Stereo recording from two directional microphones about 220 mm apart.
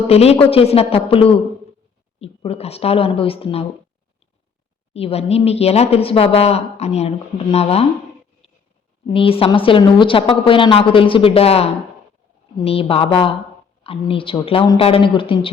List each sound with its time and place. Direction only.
0.1 s speech: 30° left (ahead or behind)
4.9 s speech: 25° left (ahead or behind)
9.1 s speech: 25° left (ahead or behind)